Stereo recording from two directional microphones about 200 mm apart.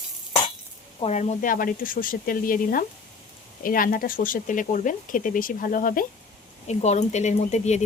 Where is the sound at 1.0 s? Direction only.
35° left (ahead or behind).